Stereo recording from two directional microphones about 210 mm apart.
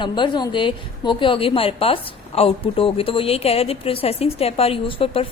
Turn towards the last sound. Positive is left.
turn(degrees=25)  # may be behind; listen again after turning